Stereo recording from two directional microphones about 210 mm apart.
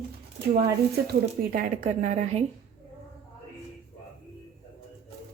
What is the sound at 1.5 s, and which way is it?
Speech, 35° right (ahead or behind).